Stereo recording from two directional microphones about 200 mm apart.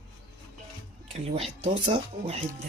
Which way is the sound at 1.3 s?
30° right (ahead or behind).